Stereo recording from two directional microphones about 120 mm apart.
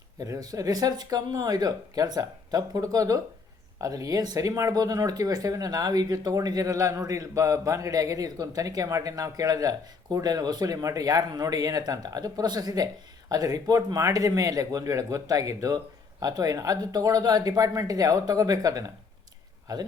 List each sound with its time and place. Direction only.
0.2 s speech: 30° right (ahead or behind)